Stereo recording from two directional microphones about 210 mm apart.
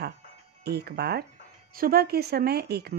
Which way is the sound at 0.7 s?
50° right (ahead or behind).